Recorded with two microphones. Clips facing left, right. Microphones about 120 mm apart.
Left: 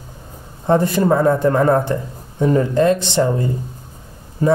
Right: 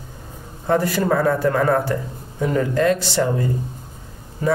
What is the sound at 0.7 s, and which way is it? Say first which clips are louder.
Speech: left 4 dB; 25° left (ahead or behind).